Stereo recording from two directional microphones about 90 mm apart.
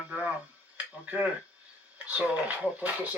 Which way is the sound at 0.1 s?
15° right (ahead or behind).